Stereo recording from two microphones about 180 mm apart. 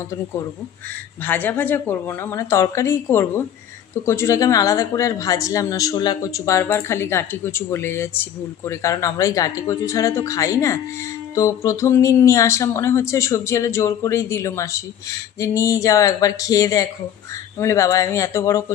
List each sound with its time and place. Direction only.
1.2 s speech: 10° left (ahead or behind)